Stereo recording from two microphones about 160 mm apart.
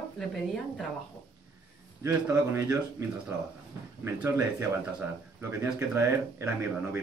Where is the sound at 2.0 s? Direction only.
20° right (ahead or behind).